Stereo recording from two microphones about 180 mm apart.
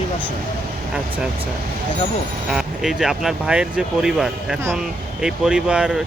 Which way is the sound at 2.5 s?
Centre (ahead or behind).